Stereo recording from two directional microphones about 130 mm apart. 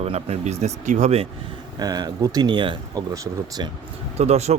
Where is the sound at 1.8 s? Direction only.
30° right (ahead or behind).